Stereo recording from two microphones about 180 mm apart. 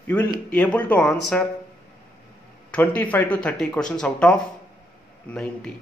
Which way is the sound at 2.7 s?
10° left (ahead or behind).